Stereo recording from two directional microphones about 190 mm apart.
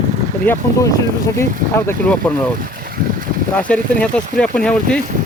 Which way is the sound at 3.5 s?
5° left (ahead or behind).